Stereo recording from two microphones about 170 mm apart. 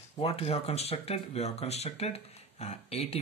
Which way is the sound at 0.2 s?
35° left (ahead or behind).